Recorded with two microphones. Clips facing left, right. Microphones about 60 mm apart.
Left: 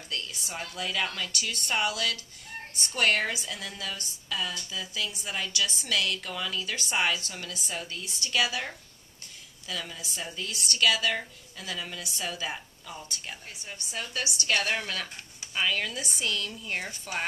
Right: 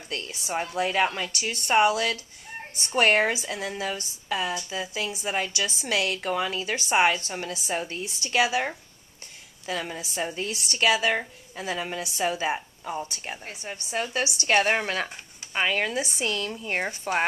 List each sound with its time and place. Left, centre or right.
0.1 s a woman's voice: right